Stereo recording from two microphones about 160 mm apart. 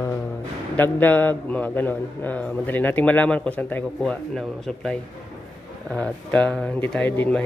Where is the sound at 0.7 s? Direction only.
10° left (ahead or behind).